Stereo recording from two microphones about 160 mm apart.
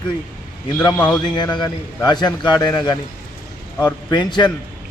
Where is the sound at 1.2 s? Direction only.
25° left (ahead or behind).